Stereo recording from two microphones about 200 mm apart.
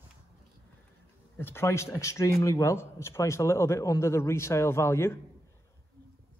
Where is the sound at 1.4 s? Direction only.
10° left (ahead or behind).